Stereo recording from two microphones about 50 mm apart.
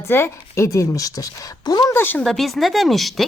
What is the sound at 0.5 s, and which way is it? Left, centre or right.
Speech, left.